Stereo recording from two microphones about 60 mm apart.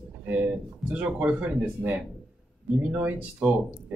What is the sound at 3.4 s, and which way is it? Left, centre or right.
Speech, centre.